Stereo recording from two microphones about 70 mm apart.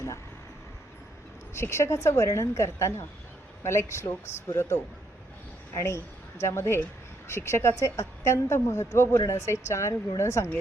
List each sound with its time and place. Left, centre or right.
1.5 s a woman's voice: left